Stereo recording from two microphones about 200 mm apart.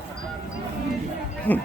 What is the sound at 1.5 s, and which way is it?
Speech, 10° left (ahead or behind).